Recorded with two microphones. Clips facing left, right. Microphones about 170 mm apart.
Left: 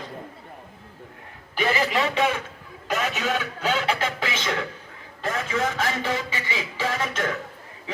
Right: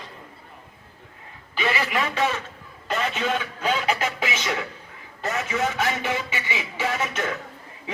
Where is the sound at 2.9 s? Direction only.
5° left (ahead or behind).